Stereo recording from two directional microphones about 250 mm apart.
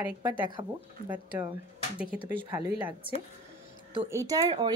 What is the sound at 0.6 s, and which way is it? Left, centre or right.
Speech, centre.